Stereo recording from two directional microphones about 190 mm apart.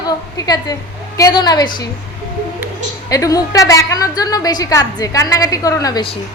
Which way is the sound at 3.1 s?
20° left (ahead or behind).